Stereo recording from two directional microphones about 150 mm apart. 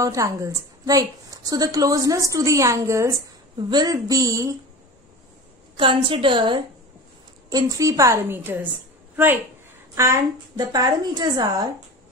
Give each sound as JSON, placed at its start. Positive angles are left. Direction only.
{"t": 0.0, "sound": "a woman's voice", "side_deg": -20}
{"t": 5.8, "sound": "a woman's voice", "side_deg": -35}